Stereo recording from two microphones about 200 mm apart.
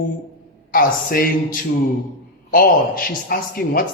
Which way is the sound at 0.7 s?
45° left (ahead or behind).